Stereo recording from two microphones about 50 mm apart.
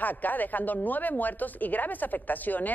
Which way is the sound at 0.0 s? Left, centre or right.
Left.